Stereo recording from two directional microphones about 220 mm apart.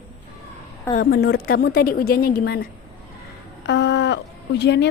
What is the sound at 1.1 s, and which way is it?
Speech, 45° left (ahead or behind).